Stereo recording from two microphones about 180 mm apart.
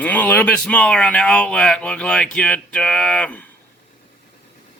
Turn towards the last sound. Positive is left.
turn(degrees=5)  # may be behind; listen again after turning